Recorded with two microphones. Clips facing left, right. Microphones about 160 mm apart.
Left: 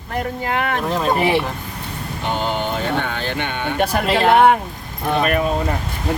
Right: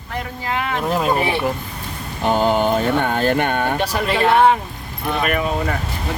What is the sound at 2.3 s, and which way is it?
Speech, 45° right (ahead or behind).